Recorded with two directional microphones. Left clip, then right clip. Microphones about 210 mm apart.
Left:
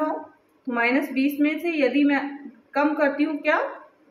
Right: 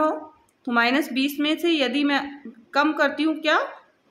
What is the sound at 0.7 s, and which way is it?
A woman's voice, 30° right (ahead or behind).